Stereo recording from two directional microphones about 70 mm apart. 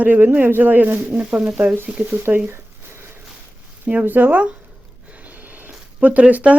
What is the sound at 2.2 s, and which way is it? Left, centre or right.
Speech, right.